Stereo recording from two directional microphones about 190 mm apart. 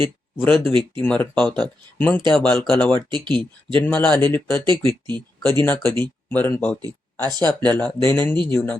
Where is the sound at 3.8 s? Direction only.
10° left (ahead or behind).